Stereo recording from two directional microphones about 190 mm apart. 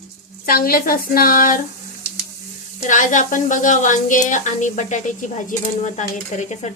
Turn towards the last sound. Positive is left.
turn(degrees=40)  # may be behind; listen again after turning